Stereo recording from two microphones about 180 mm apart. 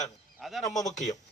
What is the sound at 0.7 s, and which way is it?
Speech, 40° left (ahead or behind).